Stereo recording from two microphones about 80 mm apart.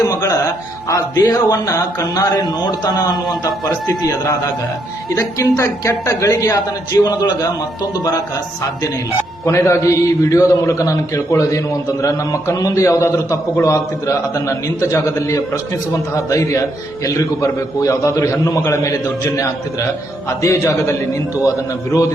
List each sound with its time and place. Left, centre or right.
0.0 s a man's voice: left
9.4 s a man's voice: left
20.4 s a man's voice: left